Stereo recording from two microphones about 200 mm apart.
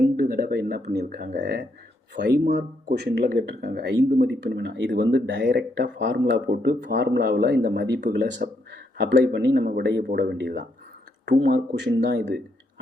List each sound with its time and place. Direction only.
0.2 s speech: 50° right (ahead or behind)